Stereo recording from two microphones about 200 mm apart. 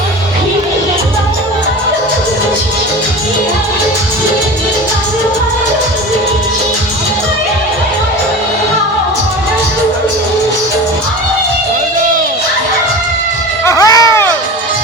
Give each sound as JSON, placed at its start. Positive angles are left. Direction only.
{"t": 13.7, "sound": "music", "side_deg": 15}